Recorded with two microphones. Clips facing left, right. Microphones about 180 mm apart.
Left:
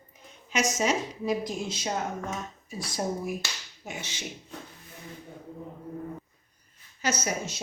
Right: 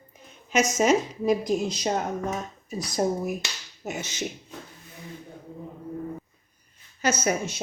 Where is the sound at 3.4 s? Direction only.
20° right (ahead or behind).